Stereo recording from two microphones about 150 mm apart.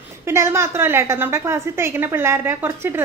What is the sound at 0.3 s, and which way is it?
A woman's voice, 15° right (ahead or behind).